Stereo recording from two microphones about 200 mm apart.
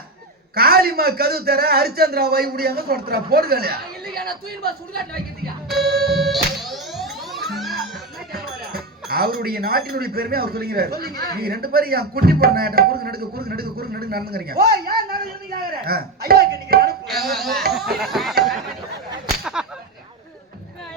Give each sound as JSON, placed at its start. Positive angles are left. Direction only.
{"t": 0.5, "sound": "a man's voice", "side_deg": -50}
{"t": 6.1, "sound": "music", "side_deg": 0}
{"t": 8.3, "sound": "speech", "side_deg": -50}
{"t": 17.1, "sound": "speech", "side_deg": 0}
{"t": 19.6, "sound": "whip", "side_deg": -5}